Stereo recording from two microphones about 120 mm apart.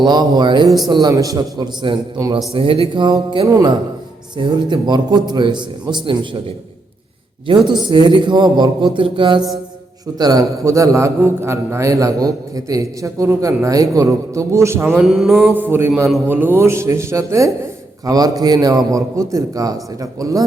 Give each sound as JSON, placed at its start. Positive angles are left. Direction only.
{"t": 0.0, "sound": "a man's voice", "side_deg": -35}
{"t": 2.5, "sound": "speech", "side_deg": -50}
{"t": 3.4, "sound": "a man's voice", "side_deg": -30}
{"t": 4.4, "sound": "a man's voice", "side_deg": -40}
{"t": 7.4, "sound": "a man's voice", "side_deg": -40}
{"t": 10.2, "sound": "a man's voice", "side_deg": -30}
{"t": 15.0, "sound": "music", "side_deg": 0}
{"t": 15.5, "sound": "a sound", "side_deg": -20}
{"t": 16.2, "sound": "a man's voice", "side_deg": -15}